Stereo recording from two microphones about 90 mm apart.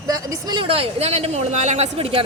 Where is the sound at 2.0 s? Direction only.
90° right.